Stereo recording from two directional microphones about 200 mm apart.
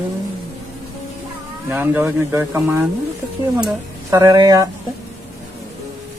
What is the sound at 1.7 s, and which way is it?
Speech, 10° right (ahead or behind).